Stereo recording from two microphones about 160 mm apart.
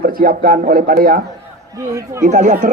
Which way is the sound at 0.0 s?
65° right (ahead or behind).